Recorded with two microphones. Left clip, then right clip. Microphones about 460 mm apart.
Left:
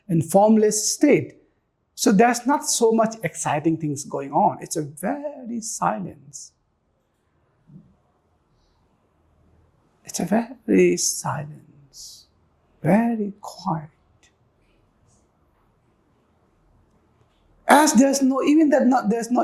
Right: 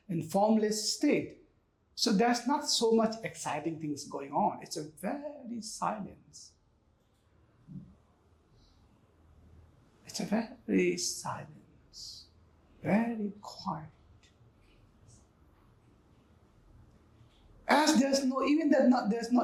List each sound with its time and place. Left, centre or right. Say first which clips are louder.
0.1 s speech: left 12 dB; left
10.1 s speech: left 11 dB; left
12.8 s speech: left 11 dB; left
17.7 s speech: left 11 dB; left